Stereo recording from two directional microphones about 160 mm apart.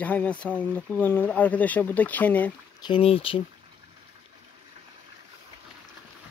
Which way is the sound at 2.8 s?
35° left (ahead or behind).